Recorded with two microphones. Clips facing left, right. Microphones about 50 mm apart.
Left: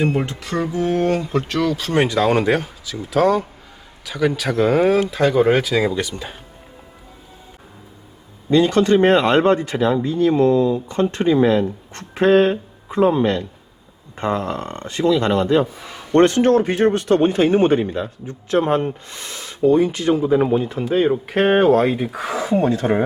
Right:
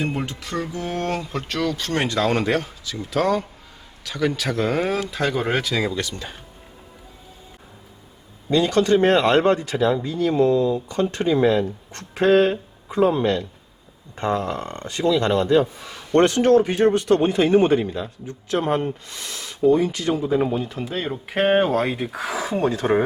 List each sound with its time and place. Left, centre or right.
0.0 s speech: centre
8.4 s speech: left
14.6 s speech: left
16.1 s a man's voice: left
20.1 s speech: centre
21.2 s speech: centre